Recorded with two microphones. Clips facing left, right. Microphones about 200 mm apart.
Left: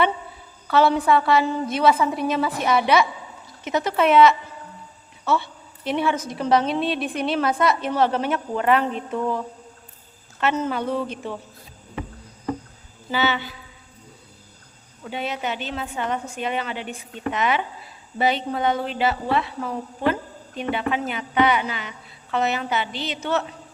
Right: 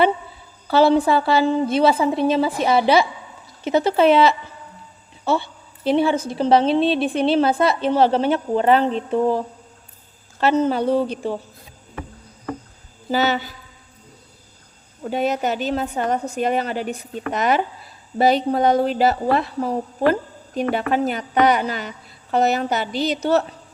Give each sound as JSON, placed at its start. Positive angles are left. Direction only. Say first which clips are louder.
{"t": 0.7, "sound": "a woman's voice", "louder": "right 3 dB", "side_deg": -30}
{"t": 13.1, "sound": "a woman's voice", "louder": "right 4 dB", "side_deg": -40}
{"t": 15.0, "sound": "a woman's voice", "louder": "right 7 dB", "side_deg": -45}